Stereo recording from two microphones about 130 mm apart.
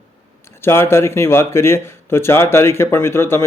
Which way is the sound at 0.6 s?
20° left (ahead or behind).